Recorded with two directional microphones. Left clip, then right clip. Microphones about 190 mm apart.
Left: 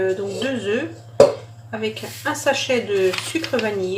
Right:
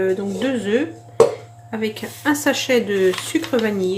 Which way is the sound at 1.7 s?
50° right (ahead or behind).